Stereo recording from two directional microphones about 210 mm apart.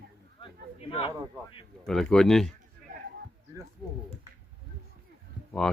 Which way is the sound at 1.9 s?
Centre (ahead or behind).